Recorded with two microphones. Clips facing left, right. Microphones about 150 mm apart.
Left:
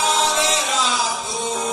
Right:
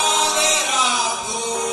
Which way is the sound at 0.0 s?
20° right (ahead or behind).